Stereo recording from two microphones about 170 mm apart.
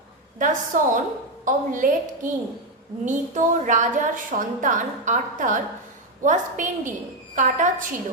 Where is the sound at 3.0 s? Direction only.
50° right (ahead or behind).